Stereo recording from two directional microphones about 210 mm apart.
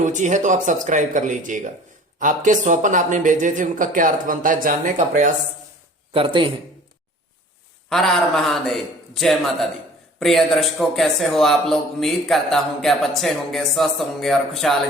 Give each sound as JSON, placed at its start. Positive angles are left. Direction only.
{"t": 0.0, "sound": "speech", "side_deg": -35}
{"t": 6.1, "sound": "a man's voice", "side_deg": -25}
{"t": 7.9, "sound": "a man's voice", "side_deg": 0}